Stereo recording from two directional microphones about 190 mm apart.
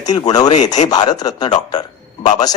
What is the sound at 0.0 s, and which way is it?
Speech, 20° left (ahead or behind).